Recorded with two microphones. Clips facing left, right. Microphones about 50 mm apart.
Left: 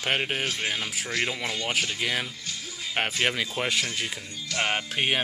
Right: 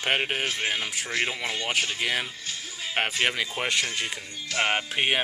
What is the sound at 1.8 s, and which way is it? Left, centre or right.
Speech, centre.